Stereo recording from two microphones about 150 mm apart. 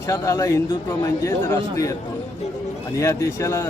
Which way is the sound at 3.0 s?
20° left (ahead or behind).